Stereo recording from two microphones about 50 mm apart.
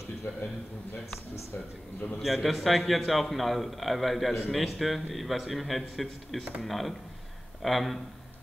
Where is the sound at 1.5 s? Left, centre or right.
Left.